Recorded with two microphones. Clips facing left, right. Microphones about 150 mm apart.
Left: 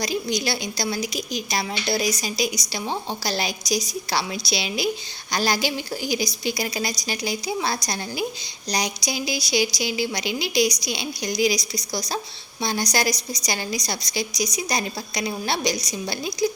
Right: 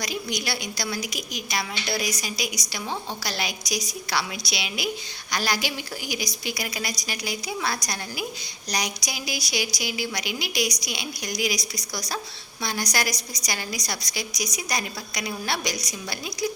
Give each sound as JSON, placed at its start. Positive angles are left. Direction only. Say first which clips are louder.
{"t": 0.0, "sound": "a woman's voice", "louder": "left 5 dB", "side_deg": 30}